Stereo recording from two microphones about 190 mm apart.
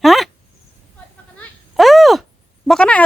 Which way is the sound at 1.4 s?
Centre (ahead or behind).